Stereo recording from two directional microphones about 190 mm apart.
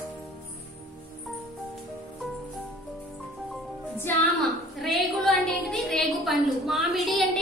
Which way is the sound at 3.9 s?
10° left (ahead or behind).